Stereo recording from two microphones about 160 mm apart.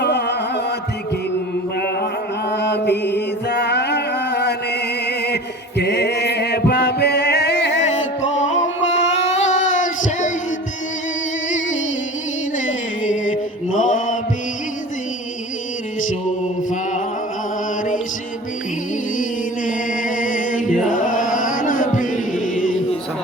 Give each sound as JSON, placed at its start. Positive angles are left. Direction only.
{"t": 0.0, "sound": "music", "side_deg": 90}
{"t": 2.5, "sound": "mantra", "side_deg": 90}
{"t": 7.9, "sound": "music", "side_deg": 50}
{"t": 9.2, "sound": "child singing", "side_deg": 45}
{"t": 11.4, "sound": "music", "side_deg": 50}
{"t": 12.5, "sound": "mantra", "side_deg": 55}
{"t": 19.1, "sound": "music", "side_deg": 55}
{"t": 20.9, "sound": "chant", "side_deg": 55}